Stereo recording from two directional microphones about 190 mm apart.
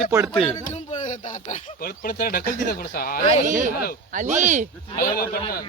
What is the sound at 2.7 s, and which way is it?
Speech, 50° left (ahead or behind).